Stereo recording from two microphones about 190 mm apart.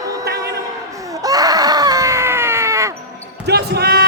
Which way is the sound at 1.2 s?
20° right (ahead or behind).